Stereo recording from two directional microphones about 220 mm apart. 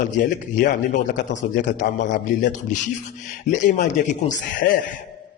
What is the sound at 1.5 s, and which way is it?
A man's voice, 35° left (ahead or behind).